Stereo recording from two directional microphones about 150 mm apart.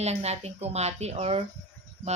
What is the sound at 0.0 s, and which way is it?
Speech, 45° right (ahead or behind).